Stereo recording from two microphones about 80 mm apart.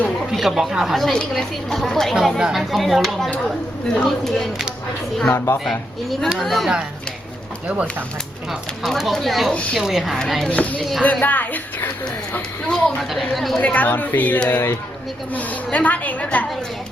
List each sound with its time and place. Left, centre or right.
0.3 s speech: centre
5.6 s speech: centre
7.7 s speech: centre
8.8 s speech: centre
10.5 s a woman's voice: centre
13.0 s speech: centre
13.6 s a woman's voice: centre